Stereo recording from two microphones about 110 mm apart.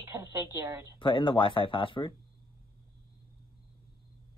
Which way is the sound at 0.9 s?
45° left (ahead or behind).